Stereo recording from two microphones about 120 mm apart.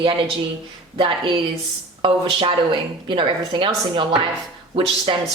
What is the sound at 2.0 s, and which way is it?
Speech, 50° right (ahead or behind).